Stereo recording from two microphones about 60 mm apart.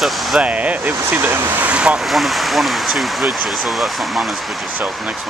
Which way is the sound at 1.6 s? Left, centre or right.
Centre.